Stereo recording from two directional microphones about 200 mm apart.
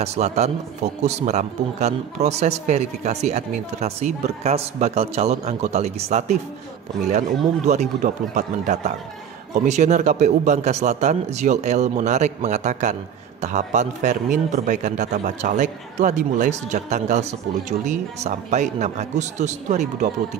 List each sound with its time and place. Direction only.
0.0 s a man's voice: 30° right (ahead or behind)